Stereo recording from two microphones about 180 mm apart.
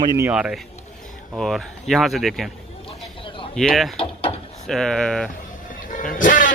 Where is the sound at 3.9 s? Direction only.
30° left (ahead or behind).